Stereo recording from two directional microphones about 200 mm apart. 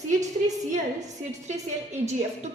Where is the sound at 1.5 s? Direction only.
35° right (ahead or behind).